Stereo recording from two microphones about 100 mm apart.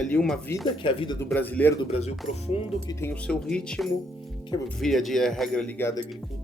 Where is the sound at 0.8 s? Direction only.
55° left (ahead or behind).